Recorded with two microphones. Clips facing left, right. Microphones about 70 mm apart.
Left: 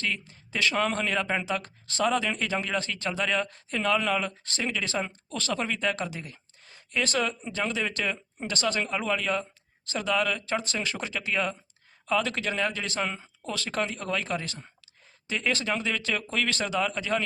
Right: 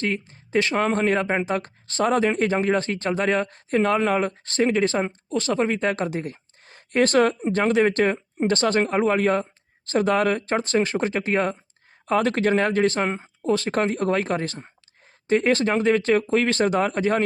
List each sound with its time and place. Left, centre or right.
0.0 s speech: right
16.6 s speech: right